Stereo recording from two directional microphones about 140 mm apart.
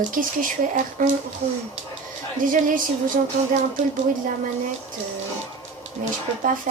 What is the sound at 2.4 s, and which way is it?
Speech, 75° right (ahead or behind).